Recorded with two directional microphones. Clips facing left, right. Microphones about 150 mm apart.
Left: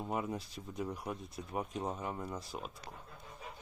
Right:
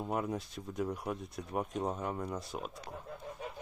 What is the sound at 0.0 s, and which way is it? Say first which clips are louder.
Speech: right 2 dB; centre (ahead or behind).